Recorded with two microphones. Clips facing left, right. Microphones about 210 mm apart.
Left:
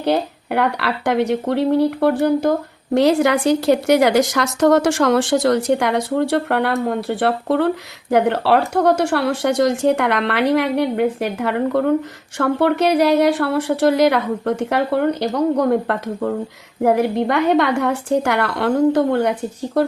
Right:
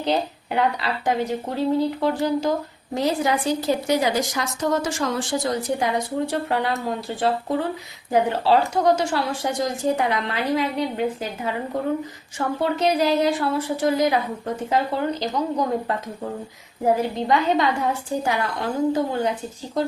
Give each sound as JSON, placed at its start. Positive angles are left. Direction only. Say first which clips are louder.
{"t": 0.0, "sound": "speech", "louder": "left 4 dB", "side_deg": 60}